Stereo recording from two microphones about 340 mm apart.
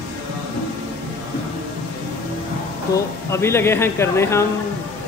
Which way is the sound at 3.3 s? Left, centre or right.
Centre.